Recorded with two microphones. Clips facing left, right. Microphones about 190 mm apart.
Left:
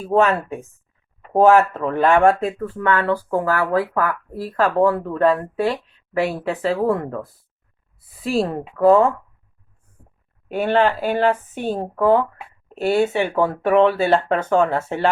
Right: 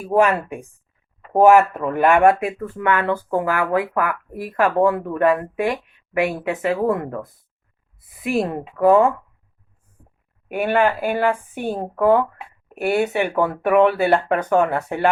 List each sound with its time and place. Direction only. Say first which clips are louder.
0.0 s speech: even; 10° right (ahead or behind)
10.5 s speech: left 1 dB; 10° right (ahead or behind)